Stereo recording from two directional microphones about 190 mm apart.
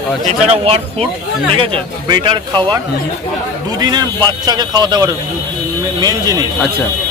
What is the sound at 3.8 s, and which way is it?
A man's voice, 20° right (ahead or behind).